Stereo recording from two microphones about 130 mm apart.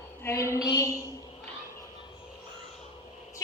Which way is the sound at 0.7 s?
25° left (ahead or behind).